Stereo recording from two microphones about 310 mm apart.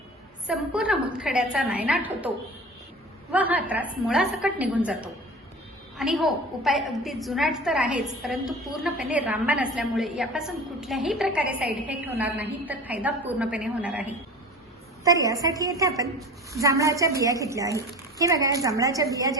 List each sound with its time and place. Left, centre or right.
0.4 s a woman's voice: centre
3.3 s a woman's voice: centre